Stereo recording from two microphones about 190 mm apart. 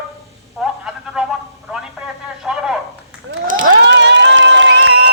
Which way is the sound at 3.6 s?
70° right (ahead or behind).